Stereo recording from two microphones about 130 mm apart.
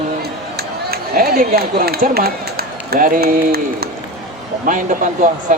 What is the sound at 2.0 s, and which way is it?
Speech, 90° right.